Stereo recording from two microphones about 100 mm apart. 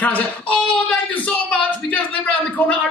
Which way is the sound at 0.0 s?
15° left (ahead or behind).